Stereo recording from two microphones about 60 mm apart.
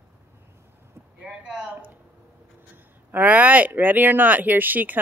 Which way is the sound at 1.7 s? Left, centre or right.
Right.